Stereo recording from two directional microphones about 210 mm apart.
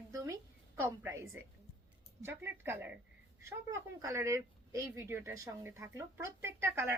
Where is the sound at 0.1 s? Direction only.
15° right (ahead or behind).